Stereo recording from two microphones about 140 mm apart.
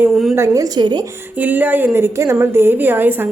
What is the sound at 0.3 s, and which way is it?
Speech, 20° right (ahead or behind).